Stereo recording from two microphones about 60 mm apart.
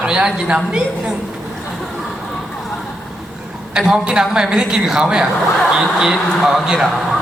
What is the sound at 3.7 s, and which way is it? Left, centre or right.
A man's voice, centre.